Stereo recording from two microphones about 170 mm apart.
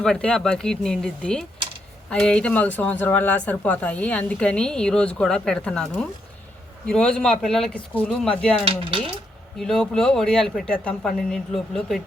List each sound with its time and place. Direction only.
0.0 s speech: 5° left (ahead or behind)
8.6 s speech: 35° right (ahead or behind)
9.6 s speech: centre (ahead or behind)